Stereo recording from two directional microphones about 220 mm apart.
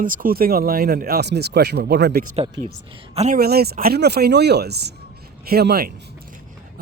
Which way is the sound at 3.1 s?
30° right (ahead or behind).